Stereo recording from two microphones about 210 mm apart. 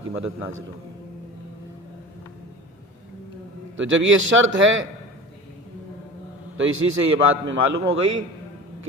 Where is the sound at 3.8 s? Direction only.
65° right (ahead or behind).